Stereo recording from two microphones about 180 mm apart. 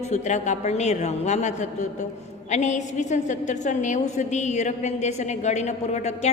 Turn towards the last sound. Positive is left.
turn(degrees=40)  # may be behind; listen again after turning